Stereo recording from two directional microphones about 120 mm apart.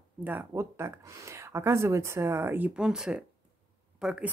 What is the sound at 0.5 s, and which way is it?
Speech, 25° right (ahead or behind).